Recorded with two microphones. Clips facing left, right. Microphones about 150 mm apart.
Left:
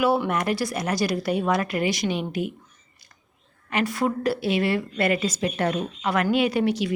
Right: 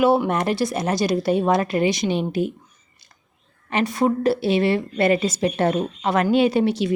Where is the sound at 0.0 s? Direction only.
25° right (ahead or behind).